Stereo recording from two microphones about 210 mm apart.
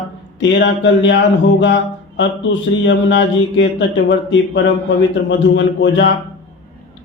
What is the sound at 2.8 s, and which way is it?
A man's voice, 60° left (ahead or behind).